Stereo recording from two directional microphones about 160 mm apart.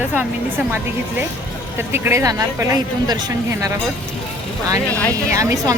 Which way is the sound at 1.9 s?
15° right (ahead or behind).